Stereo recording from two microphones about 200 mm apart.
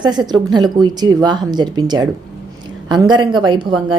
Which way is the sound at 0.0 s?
20° right (ahead or behind).